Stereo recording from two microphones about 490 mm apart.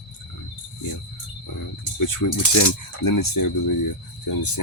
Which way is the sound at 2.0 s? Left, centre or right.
Left.